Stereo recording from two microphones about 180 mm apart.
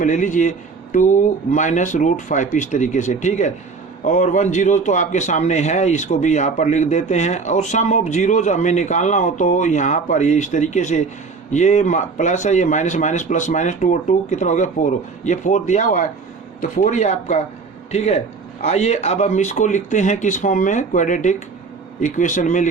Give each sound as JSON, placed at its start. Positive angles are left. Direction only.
{"t": 0.0, "sound": "a man's voice", "side_deg": 45}